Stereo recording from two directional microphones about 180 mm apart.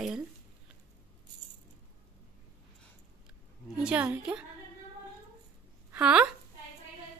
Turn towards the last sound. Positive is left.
turn(degrees=-5)  # may be behind; listen again after turning